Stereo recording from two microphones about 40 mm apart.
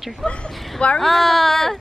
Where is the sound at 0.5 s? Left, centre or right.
Centre.